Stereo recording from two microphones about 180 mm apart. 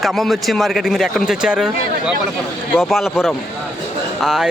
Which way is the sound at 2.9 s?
Centre (ahead or behind).